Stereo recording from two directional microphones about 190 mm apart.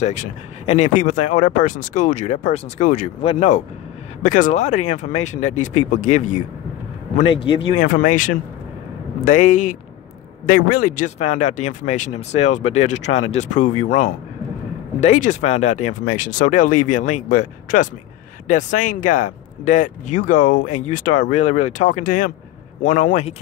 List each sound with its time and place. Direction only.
0.0 s speech: 40° left (ahead or behind)
7.8 s speech: 45° left (ahead or behind)